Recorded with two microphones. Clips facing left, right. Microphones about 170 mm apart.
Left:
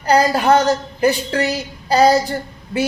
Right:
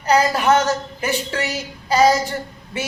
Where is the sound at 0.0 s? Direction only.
35° left (ahead or behind).